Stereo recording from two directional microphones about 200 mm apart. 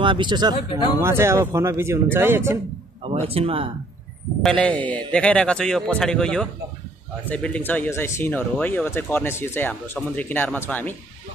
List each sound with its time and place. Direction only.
0.0 s speech: 25° right (ahead or behind)
3.1 s speech: 30° right (ahead or behind)
4.4 s speech: 5° left (ahead or behind)